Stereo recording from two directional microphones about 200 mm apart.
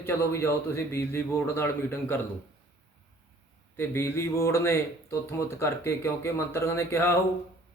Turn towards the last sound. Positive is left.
turn(degrees=10)  # may be behind; listen again after turning